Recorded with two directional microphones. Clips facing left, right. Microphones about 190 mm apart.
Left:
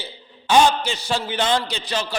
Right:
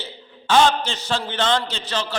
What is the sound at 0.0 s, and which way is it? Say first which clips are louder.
A man's voice: right 1 dB; 15° left (ahead or behind).